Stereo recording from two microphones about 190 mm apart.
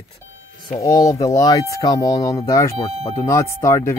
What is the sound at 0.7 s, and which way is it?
Speech, 20° left (ahead or behind).